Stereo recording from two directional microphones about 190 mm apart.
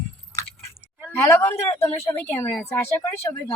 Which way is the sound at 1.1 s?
15° left (ahead or behind).